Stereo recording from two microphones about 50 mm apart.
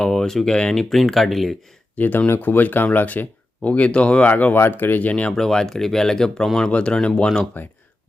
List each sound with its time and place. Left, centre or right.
0.0 s speech: centre
2.0 s speech: left
4.3 s speech: left
5.3 s speech: centre
6.7 s speech: left
7.6 s speech: left